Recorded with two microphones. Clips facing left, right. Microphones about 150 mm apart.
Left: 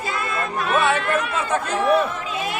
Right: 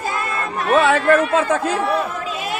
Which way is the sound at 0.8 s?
90° right.